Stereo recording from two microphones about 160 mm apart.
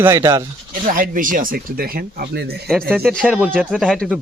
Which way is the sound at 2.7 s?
5° left (ahead or behind).